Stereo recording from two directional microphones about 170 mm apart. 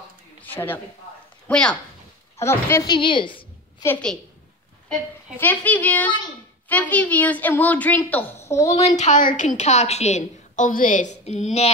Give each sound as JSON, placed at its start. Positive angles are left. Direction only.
{"t": 0.4, "sound": "a sound", "side_deg": 10}
{"t": 1.5, "sound": "a woman's voice", "side_deg": 5}
{"t": 2.9, "sound": "a woman's voice", "side_deg": 30}
{"t": 3.8, "sound": "a woman's voice", "side_deg": 10}
{"t": 5.4, "sound": "a woman's voice", "side_deg": 10}
{"t": 8.6, "sound": "a woman's voice", "side_deg": 40}